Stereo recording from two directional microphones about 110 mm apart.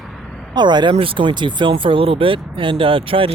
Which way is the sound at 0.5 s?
45° right (ahead or behind).